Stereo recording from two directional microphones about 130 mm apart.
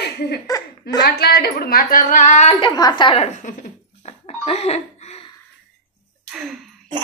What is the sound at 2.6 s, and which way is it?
Speech, 35° left (ahead or behind).